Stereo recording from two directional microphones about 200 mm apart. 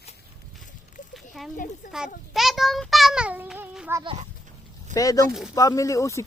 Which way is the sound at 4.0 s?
25° right (ahead or behind).